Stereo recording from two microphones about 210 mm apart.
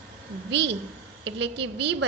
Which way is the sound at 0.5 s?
55° right (ahead or behind).